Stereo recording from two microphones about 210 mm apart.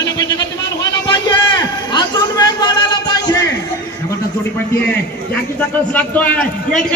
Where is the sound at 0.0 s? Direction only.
15° left (ahead or behind).